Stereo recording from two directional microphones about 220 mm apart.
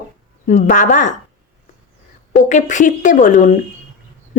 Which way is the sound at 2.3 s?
35° left (ahead or behind).